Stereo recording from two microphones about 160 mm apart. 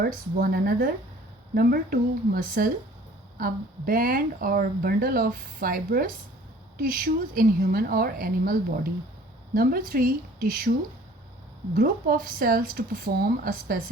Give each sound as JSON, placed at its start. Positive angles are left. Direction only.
{"t": 0.0, "sound": "speech", "side_deg": -75}
{"t": 11.7, "sound": "speech", "side_deg": -60}